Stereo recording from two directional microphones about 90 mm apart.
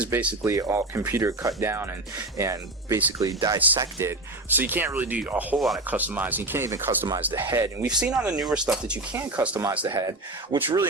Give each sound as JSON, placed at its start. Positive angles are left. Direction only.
{"t": 0.1, "sound": "speech", "side_deg": -25}
{"t": 0.4, "sound": "speech", "side_deg": -35}
{"t": 5.5, "sound": "speech", "side_deg": 0}
{"t": 5.8, "sound": "speech", "side_deg": -20}
{"t": 7.5, "sound": "speech", "side_deg": -30}
{"t": 7.9, "sound": "speech", "side_deg": -10}
{"t": 8.4, "sound": "speech", "side_deg": 0}
{"t": 9.8, "sound": "speech", "side_deg": -50}